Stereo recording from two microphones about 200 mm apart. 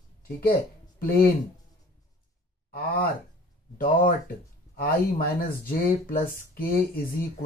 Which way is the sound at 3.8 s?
45° left (ahead or behind).